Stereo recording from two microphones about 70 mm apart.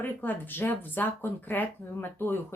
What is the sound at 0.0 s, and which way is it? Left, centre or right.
A woman's voice, left.